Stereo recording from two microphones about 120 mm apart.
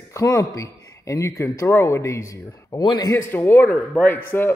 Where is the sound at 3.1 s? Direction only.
20° left (ahead or behind).